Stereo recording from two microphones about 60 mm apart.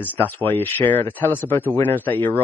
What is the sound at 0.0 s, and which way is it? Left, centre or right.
Speech, left.